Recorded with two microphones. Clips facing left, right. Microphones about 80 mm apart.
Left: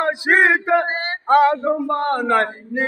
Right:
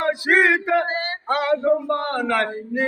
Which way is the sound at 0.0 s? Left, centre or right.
Left.